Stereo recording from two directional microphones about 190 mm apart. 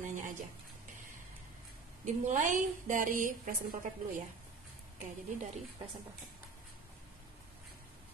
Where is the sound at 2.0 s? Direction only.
40° right (ahead or behind).